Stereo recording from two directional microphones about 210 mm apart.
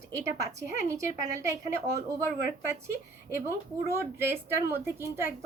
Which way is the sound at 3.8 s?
10° right (ahead or behind).